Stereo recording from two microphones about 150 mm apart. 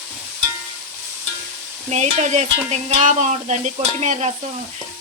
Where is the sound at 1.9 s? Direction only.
50° right (ahead or behind).